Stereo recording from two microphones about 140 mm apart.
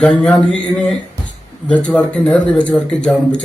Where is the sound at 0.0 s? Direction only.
5° left (ahead or behind).